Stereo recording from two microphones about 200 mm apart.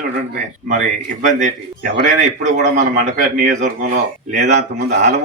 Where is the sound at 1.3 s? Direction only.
40° right (ahead or behind).